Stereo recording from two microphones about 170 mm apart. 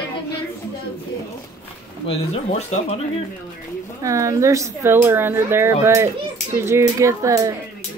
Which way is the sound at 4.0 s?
20° right (ahead or behind).